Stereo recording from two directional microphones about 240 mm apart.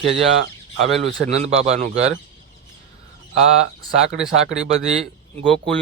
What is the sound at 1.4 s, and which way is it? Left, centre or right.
Speech, right.